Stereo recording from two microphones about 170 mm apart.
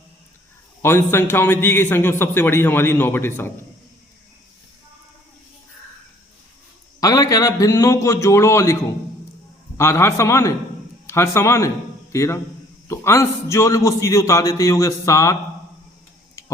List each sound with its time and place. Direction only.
0.8 s a man's voice: 15° left (ahead or behind)
7.0 s a man's voice: 20° left (ahead or behind)
16.4 s tick-tock: 20° left (ahead or behind)